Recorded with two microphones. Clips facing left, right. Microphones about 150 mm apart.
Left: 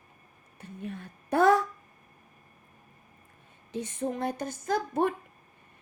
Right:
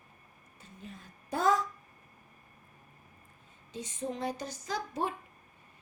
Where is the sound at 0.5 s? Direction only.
65° left (ahead or behind).